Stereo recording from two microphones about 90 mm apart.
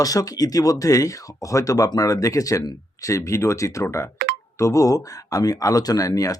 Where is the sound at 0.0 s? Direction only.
40° left (ahead or behind).